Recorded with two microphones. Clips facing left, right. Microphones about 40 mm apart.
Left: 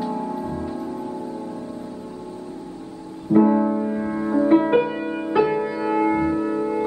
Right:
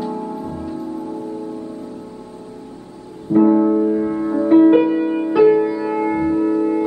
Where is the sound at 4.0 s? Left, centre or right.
Left.